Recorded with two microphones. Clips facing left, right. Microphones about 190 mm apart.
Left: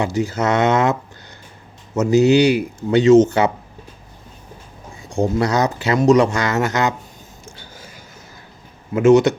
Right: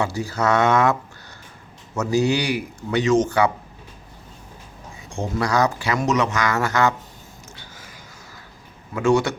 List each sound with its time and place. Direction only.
0.0 s speech: 20° left (ahead or behind)
2.0 s speech: 20° left (ahead or behind)
5.4 s speech: 20° left (ahead or behind)
9.0 s speech: 20° left (ahead or behind)